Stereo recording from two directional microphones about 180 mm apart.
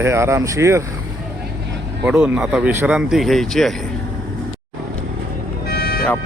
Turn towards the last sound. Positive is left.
turn(degrees=60)  # may be behind; listen again after turning